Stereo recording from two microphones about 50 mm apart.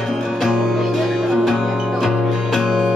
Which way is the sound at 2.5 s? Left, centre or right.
Centre.